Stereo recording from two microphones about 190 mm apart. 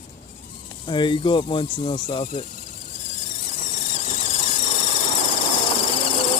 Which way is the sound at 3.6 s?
45° left (ahead or behind).